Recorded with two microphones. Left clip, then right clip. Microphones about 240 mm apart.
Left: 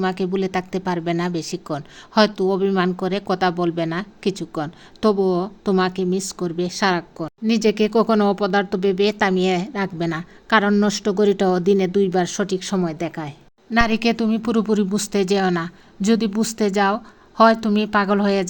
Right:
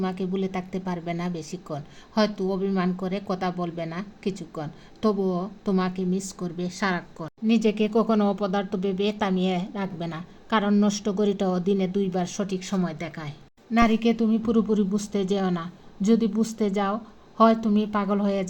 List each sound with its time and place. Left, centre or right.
0.0 s speech: left; by 13.3 s centre
13.7 s speech: left